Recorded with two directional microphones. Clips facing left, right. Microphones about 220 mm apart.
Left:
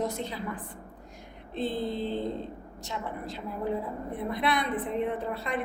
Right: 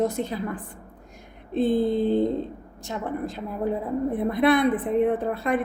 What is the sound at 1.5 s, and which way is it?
A woman's voice, 50° right (ahead or behind).